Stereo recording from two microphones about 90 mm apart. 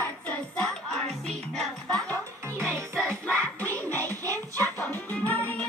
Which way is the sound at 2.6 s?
25° right (ahead or behind).